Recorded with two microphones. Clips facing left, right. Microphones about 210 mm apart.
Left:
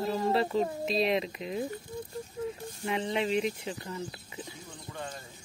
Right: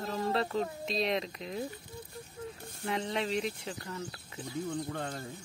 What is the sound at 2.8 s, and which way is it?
Speech, 5° left (ahead or behind).